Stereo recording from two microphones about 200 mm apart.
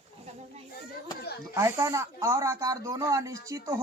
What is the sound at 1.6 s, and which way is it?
Speech, 15° right (ahead or behind).